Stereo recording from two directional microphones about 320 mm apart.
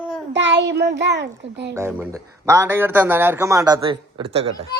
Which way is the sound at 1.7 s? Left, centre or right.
Centre.